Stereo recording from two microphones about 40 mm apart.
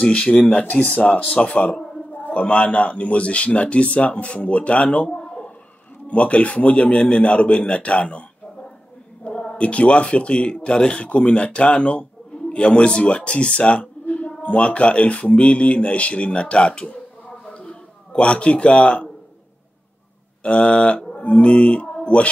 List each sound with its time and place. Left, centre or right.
0.0 s speech: left
17.6 s a sound: left
20.4 s speech: left